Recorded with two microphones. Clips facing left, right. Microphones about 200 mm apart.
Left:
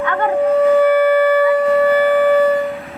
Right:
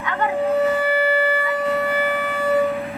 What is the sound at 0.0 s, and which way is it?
Siren, 55° left (ahead or behind).